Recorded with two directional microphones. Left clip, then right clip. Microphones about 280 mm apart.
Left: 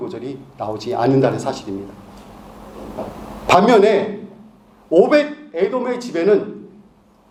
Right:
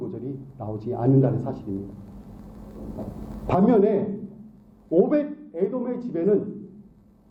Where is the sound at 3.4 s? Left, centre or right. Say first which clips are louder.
Left 9 dB; centre.